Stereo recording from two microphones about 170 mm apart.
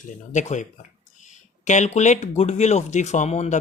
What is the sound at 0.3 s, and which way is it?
A man's voice, 45° left (ahead or behind).